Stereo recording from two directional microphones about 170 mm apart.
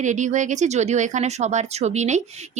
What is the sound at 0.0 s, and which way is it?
Speech, 45° right (ahead or behind).